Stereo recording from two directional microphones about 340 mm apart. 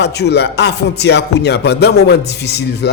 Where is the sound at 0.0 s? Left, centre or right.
Left.